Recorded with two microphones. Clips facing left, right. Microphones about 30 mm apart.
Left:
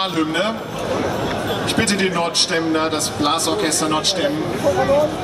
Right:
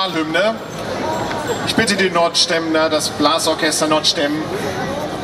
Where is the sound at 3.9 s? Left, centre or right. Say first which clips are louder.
Right 3 dB; right.